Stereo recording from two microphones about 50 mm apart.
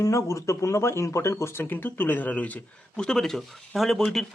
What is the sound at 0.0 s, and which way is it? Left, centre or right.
Speech, left.